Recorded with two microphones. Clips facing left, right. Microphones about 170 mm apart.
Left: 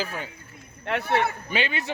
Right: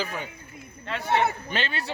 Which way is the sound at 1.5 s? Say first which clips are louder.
Left 3 dB; 15° left (ahead or behind).